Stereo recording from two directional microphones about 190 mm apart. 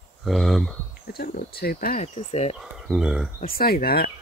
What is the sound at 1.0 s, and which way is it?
Speech, 55° left (ahead or behind).